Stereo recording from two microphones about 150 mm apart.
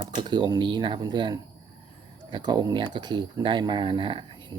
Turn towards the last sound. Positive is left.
turn(degrees=-35)  # may be behind; listen again after turning